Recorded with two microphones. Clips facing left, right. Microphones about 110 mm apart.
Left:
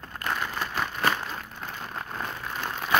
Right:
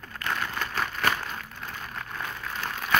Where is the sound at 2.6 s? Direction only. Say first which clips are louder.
Left 1 dB; 20° left (ahead or behind).